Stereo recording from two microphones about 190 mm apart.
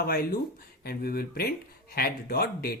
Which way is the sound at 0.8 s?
55° left (ahead or behind).